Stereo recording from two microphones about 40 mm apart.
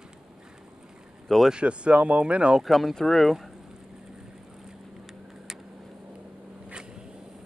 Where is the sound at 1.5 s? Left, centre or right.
Right.